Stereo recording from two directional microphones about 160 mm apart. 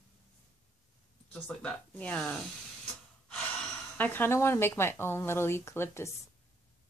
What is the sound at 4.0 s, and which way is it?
A woman's voice, 10° left (ahead or behind).